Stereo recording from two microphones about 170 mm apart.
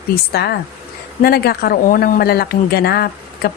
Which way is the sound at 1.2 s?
65° left (ahead or behind).